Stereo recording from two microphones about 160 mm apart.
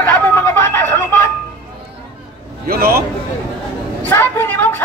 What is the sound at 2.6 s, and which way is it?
Music, 70° right (ahead or behind).